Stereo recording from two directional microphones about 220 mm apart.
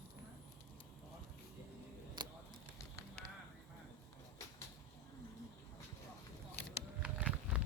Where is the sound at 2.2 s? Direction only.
20° right (ahead or behind).